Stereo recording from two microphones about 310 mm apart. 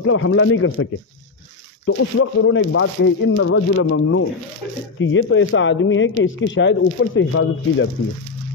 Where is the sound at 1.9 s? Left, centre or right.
Left.